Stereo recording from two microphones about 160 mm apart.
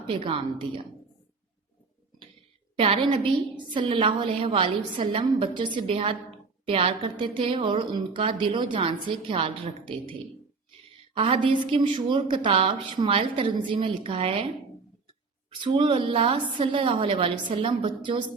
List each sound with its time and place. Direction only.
0.1 s a woman's voice: 35° right (ahead or behind)
2.7 s a woman's voice: 35° right (ahead or behind)
11.2 s a woman's voice: 35° right (ahead or behind)
15.6 s a woman's voice: 30° right (ahead or behind)